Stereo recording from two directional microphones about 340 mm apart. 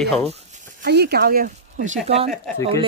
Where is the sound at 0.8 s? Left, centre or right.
Right.